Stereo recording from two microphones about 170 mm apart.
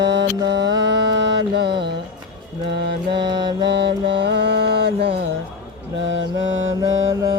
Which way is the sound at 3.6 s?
90° right.